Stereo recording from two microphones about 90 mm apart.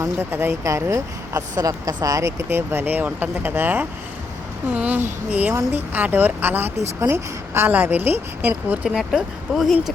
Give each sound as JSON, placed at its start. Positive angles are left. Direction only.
{"t": 0.2, "sound": "speech", "side_deg": -25}